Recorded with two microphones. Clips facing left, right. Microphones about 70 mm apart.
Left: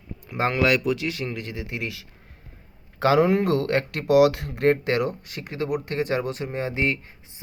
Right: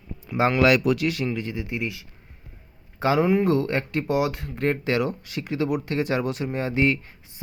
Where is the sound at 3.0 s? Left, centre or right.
Left.